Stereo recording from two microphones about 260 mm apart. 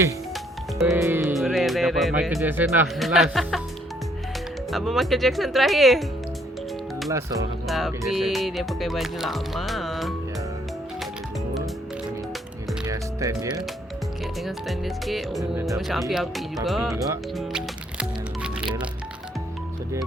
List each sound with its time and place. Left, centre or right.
0.9 s speech: centre
4.7 s speech: centre
7.1 s speech: centre
7.7 s speech: centre
12.8 s music: centre
14.4 s speech: centre
17.3 s music: centre